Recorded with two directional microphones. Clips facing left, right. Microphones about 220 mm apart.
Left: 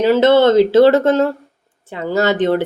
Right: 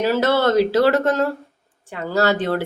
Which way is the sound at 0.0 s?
20° left (ahead or behind).